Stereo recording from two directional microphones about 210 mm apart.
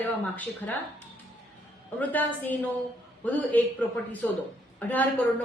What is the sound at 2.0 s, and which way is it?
A woman's voice, 10° left (ahead or behind).